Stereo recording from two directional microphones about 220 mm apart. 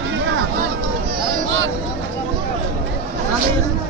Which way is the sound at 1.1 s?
55° right (ahead or behind).